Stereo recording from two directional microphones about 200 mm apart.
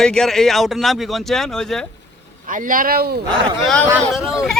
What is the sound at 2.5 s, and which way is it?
Speech, 40° right (ahead or behind).